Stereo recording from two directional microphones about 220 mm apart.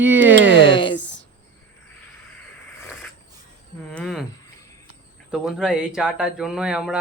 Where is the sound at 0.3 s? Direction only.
55° right (ahead or behind).